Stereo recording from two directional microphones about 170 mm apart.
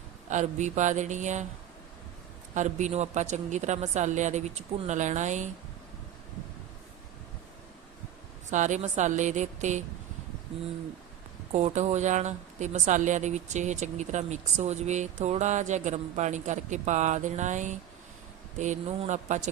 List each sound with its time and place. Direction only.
0.3 s a woman's voice: 45° right (ahead or behind)
2.6 s a woman's voice: 45° right (ahead or behind)
8.4 s a woman's voice: 45° right (ahead or behind)
11.5 s a woman's voice: 40° right (ahead or behind)